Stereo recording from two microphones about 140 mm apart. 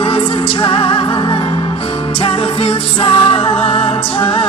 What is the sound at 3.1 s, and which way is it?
Music, 40° left (ahead or behind).